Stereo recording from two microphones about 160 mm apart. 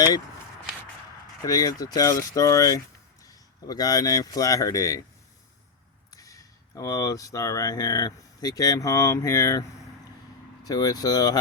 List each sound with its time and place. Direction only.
1.5 s speech: 25° left (ahead or behind)
6.1 s speech: 20° left (ahead or behind)